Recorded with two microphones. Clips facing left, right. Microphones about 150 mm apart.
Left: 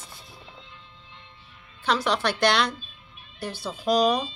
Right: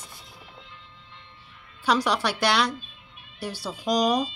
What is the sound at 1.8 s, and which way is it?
Speech, 10° right (ahead or behind).